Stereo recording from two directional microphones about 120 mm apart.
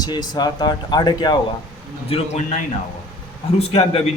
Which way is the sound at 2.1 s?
55° left (ahead or behind).